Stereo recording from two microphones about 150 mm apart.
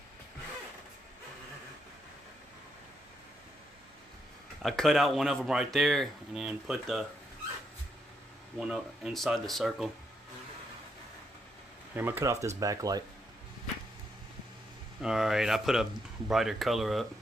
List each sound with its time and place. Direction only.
4.6 s speech: centre (ahead or behind)
8.5 s speech: 5° right (ahead or behind)
11.9 s speech: 15° right (ahead or behind)
15.0 s speech: 5° right (ahead or behind)